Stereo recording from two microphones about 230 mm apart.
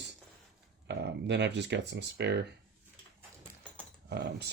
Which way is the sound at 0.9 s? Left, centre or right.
Right.